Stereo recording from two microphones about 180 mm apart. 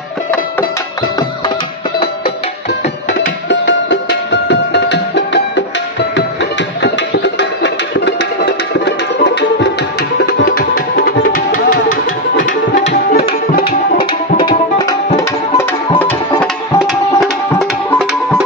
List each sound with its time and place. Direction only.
3.4 s music: 75° left (ahead or behind)
7.3 s music: 75° left (ahead or behind)
10.2 s music: 60° left (ahead or behind)
13.6 s tabla: 55° left (ahead or behind)
14.4 s tabla: 20° left (ahead or behind)
16.3 s tabla: centre (ahead or behind)